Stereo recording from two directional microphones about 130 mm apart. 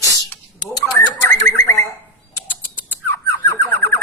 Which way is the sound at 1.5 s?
20° left (ahead or behind).